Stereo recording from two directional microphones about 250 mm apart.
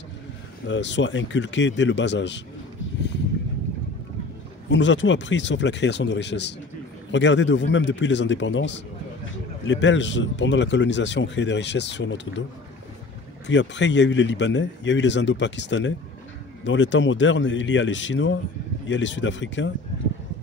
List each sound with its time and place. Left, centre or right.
0.7 s a man's voice: left
4.6 s a man's voice: left
13.5 s a man's voice: left